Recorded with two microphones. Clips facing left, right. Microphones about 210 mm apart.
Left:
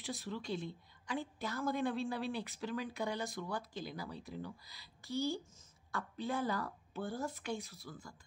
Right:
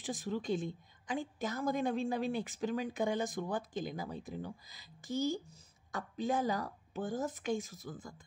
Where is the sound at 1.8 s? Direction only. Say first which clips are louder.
Right 2 dB; 45° right (ahead or behind).